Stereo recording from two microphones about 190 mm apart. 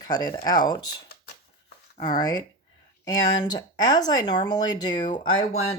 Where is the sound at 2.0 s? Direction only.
20° left (ahead or behind).